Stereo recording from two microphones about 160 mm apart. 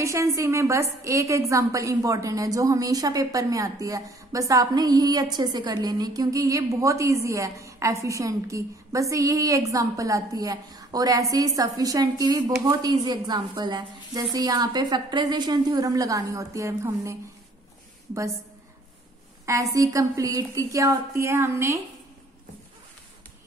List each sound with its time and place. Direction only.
0.0 s a woman's voice: 20° right (ahead or behind)
19.4 s a woman's voice: 20° right (ahead or behind)